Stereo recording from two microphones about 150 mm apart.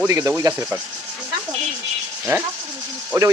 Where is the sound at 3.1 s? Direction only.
25° right (ahead or behind).